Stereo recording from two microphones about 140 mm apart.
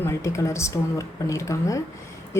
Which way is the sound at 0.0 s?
20° left (ahead or behind).